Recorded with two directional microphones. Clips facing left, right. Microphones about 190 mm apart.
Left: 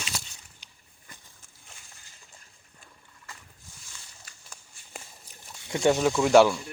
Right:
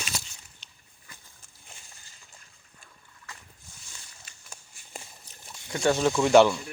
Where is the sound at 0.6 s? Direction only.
15° left (ahead or behind).